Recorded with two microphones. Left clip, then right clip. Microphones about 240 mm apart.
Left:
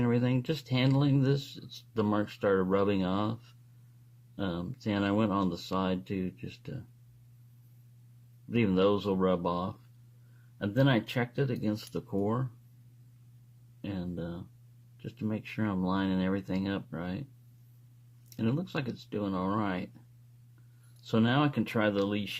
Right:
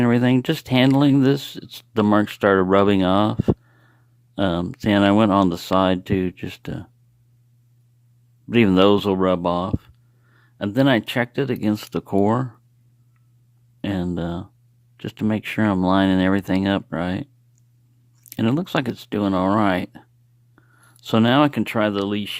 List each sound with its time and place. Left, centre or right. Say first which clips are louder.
0.0 s speech: right 12 dB; right
4.4 s speech: right 14 dB; right
8.4 s speech: right 12 dB; right
13.8 s speech: right 13 dB; right
18.3 s speech: right 12 dB; right
21.0 s speech: right 12 dB; right